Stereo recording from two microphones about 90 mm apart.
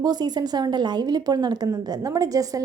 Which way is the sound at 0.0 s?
50° right (ahead or behind).